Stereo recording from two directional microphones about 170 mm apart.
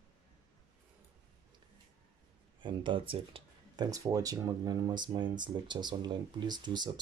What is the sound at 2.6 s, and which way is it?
Speech, 30° right (ahead or behind).